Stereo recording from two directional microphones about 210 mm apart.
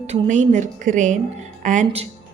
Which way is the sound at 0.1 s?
35° right (ahead or behind).